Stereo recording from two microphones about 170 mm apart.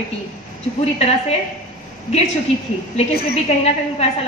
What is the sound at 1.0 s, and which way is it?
Speech, 40° left (ahead or behind).